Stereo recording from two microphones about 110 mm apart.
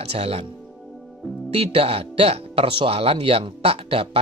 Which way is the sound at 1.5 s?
60° right (ahead or behind).